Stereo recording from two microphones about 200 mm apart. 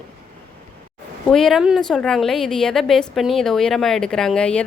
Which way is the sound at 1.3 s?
Centre (ahead or behind).